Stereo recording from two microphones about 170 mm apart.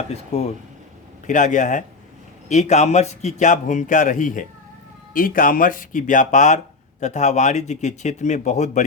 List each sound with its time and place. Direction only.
0.1 s speech: 40° left (ahead or behind)
1.3 s speech: 50° left (ahead or behind)